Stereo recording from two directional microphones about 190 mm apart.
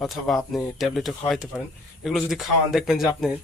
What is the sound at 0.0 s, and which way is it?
Speech, centre (ahead or behind).